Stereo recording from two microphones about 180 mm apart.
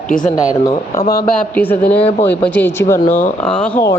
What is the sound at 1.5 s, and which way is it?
Speech, 10° left (ahead or behind).